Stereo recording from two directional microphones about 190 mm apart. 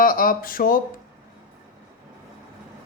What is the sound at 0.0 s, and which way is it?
Speech, 45° left (ahead or behind).